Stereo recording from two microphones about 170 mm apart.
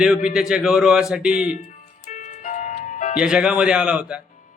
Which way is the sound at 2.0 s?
45° left (ahead or behind).